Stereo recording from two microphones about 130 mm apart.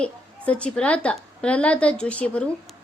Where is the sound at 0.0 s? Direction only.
10° left (ahead or behind).